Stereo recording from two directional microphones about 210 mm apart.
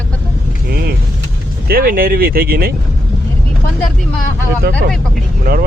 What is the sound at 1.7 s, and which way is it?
Speech, 45° right (ahead or behind).